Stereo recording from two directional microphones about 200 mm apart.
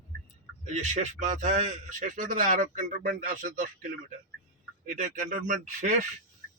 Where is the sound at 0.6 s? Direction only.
35° right (ahead or behind).